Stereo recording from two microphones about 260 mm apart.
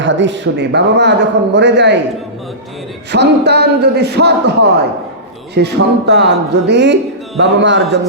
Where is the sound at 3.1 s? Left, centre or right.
Right.